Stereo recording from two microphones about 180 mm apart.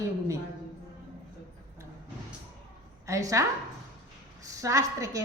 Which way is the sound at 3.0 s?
20° right (ahead or behind).